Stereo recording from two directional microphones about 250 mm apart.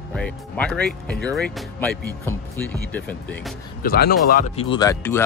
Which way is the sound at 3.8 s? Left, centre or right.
Left.